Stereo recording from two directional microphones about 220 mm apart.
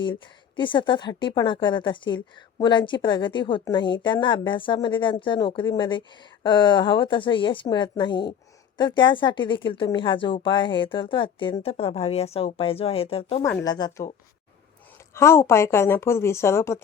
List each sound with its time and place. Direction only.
0.5 s a woman's voice: 20° left (ahead or behind)
15.1 s a woman's voice: 10° left (ahead or behind)